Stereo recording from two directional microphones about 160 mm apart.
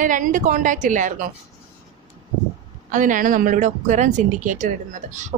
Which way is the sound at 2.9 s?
55° right (ahead or behind).